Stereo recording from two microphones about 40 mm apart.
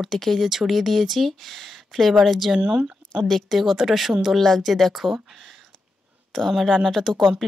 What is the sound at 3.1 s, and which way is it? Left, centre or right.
Speech, centre.